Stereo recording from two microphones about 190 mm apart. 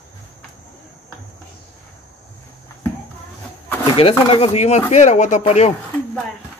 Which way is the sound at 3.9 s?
30° left (ahead or behind).